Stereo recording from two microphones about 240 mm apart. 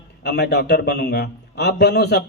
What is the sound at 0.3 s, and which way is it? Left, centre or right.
A man's voice, left.